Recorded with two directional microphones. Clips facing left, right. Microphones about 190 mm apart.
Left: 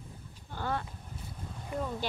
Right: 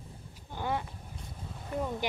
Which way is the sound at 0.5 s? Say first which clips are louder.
Right 1 dB; 15° right (ahead or behind).